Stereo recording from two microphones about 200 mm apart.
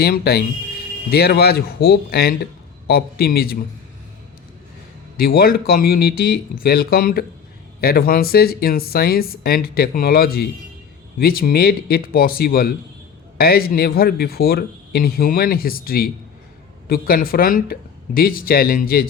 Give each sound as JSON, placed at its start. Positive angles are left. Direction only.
{"t": 0.0, "sound": "speech", "side_deg": 50}
{"t": 5.1, "sound": "speech", "side_deg": 50}